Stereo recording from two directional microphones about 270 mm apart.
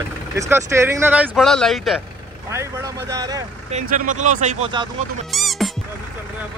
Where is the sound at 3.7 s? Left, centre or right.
Right.